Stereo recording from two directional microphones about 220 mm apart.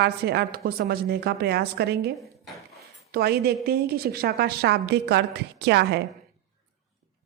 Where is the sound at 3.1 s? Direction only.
45° right (ahead or behind).